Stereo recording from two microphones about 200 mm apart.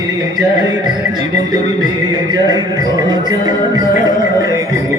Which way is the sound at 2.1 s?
20° right (ahead or behind).